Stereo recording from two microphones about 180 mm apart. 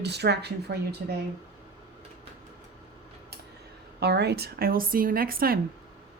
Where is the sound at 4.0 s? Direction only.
65° right (ahead or behind).